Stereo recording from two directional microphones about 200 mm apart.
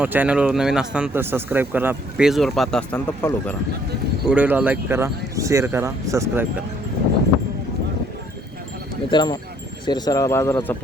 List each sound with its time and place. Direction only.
0.0 s speech: 10° right (ahead or behind); by 3.5 s 10° left (ahead or behind)
4.3 s speech: 10° right (ahead or behind)
9.0 s speech: 20° left (ahead or behind)